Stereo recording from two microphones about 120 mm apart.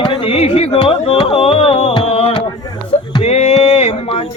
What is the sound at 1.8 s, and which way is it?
Music, 75° left (ahead or behind).